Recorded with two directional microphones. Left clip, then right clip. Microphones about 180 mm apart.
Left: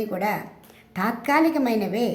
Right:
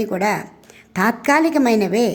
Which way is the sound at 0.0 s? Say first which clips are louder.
Right 6 dB; 35° right (ahead or behind).